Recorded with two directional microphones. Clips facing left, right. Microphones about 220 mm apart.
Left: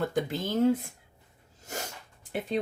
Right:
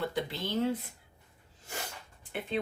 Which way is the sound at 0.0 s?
45° left (ahead or behind).